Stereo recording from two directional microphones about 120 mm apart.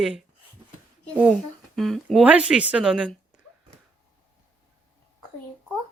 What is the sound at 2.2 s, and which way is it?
A woman's voice, 10° right (ahead or behind).